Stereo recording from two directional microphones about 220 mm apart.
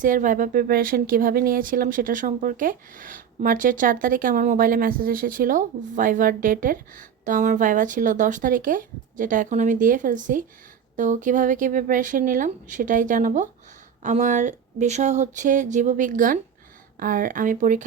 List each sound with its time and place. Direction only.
0.0 s a woman's voice: 35° right (ahead or behind)